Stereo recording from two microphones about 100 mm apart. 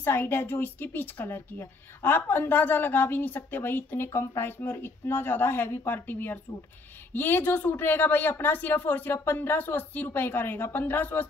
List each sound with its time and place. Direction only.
0.0 s a woman's voice: 20° left (ahead or behind)